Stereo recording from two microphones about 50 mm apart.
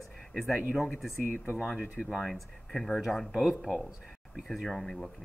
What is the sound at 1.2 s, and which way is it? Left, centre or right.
Speech, left.